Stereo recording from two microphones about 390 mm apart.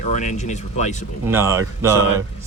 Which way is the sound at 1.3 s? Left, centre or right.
Centre.